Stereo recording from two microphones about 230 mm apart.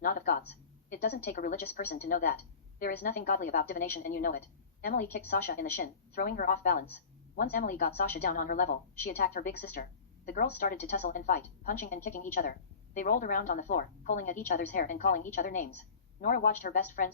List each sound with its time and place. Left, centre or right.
0.0 s a woman's voice: left